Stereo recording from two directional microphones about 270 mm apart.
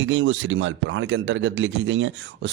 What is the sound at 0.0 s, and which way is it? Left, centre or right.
Speech, right.